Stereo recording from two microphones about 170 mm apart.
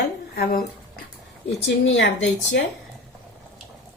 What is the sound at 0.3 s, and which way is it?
Speech, 70° left (ahead or behind).